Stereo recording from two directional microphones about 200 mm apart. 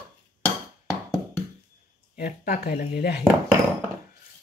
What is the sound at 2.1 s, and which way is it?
Speech, 50° left (ahead or behind).